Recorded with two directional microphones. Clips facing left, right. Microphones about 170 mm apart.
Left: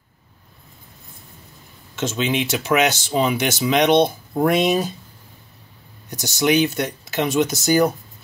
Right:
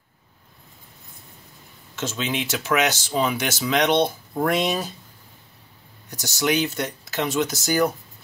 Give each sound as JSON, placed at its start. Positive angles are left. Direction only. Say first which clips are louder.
{"t": 2.0, "sound": "speech", "louder": "left 5 dB", "side_deg": 20}
{"t": 6.0, "sound": "speech", "louder": "left 4 dB", "side_deg": 15}